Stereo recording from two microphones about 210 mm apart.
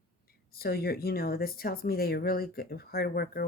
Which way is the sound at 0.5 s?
45° left (ahead or behind).